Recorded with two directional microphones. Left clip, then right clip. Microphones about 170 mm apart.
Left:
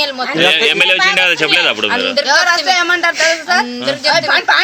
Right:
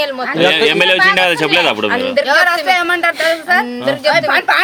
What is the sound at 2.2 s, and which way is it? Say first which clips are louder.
A woman's voice: even; 25° right (ahead or behind).